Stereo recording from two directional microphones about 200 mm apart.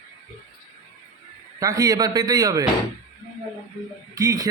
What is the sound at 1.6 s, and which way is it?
A man's voice, 15° right (ahead or behind).